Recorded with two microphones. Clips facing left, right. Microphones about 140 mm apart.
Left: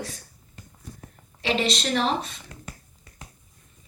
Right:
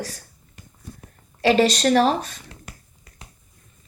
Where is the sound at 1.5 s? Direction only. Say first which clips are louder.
Right 8 dB; 45° right (ahead or behind).